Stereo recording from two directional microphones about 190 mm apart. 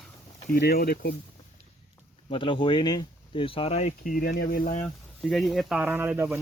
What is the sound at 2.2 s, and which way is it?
Speech, 25° left (ahead or behind).